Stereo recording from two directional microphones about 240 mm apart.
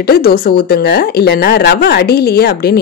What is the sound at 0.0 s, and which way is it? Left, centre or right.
Speech, left.